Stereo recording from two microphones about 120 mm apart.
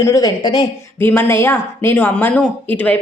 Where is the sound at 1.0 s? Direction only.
20° left (ahead or behind).